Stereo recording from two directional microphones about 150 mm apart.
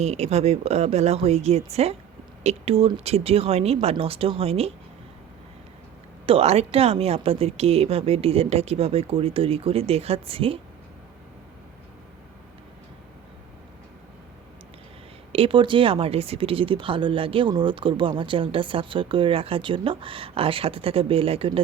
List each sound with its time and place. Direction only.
0.0 s speech: 45° right (ahead or behind)
6.2 s speech: 40° right (ahead or behind)
15.3 s speech: 35° right (ahead or behind)